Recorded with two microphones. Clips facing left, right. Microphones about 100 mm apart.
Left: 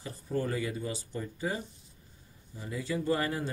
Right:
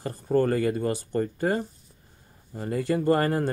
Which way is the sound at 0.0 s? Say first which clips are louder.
Right 10 dB; 60° right (ahead or behind).